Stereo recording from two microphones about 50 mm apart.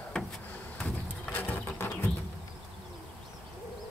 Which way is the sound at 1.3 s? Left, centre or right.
Left.